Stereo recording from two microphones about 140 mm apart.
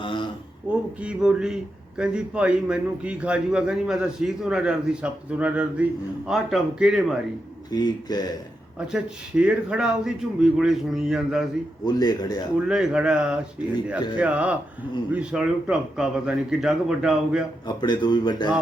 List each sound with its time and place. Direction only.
0.0 s a sound: 35° left (ahead or behind)
0.7 s a man's voice: 10° right (ahead or behind)
7.7 s speech: 30° left (ahead or behind)
8.9 s a man's voice: 5° right (ahead or behind)
11.9 s speech: 30° left (ahead or behind)
12.6 s a man's voice: 5° right (ahead or behind)
17.7 s a man's voice: 30° left (ahead or behind)